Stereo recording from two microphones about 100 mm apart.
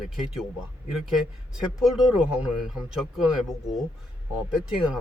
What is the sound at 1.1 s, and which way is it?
Speech, 5° right (ahead or behind).